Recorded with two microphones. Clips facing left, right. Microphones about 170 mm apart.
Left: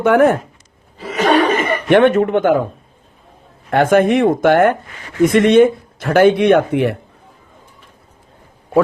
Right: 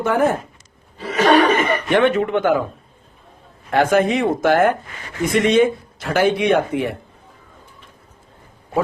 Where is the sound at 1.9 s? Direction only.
50° left (ahead or behind).